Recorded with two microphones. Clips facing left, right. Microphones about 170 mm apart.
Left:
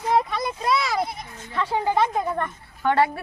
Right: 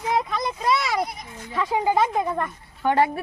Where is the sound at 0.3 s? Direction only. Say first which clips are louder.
Right 1 dB; centre (ahead or behind).